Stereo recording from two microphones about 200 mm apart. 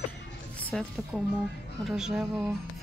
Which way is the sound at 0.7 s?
Centre (ahead or behind).